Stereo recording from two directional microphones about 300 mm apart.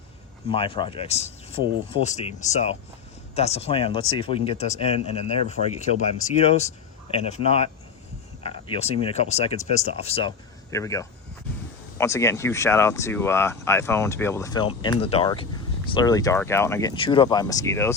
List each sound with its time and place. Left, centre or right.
0.5 s speech: centre